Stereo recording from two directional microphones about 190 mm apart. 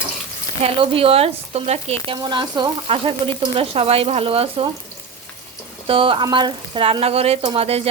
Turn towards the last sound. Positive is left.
turn(degrees=-30)  # may be behind; listen again after turning